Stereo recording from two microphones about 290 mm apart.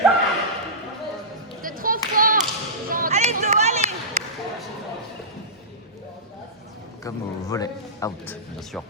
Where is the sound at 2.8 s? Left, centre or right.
Right.